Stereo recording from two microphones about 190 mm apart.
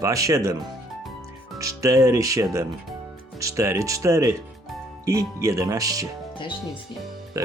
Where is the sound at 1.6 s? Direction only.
15° right (ahead or behind).